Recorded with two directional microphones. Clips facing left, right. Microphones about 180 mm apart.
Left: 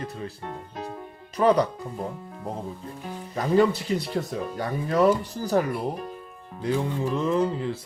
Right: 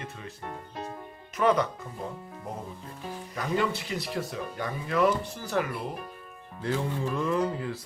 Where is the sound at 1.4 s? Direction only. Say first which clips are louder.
Left 4 dB; 35° left (ahead or behind).